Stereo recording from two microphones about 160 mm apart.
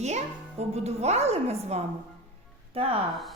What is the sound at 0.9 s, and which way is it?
Speech, 45° right (ahead or behind).